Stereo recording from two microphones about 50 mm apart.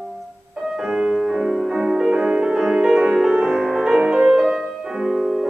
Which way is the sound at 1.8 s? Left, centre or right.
Centre.